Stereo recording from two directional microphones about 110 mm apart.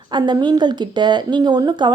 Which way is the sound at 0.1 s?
40° right (ahead or behind).